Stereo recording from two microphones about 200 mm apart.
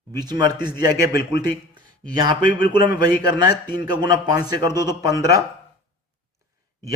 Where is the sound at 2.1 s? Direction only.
20° right (ahead or behind).